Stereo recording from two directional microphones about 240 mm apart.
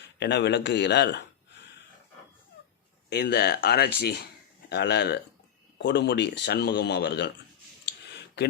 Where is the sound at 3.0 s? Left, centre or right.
Left.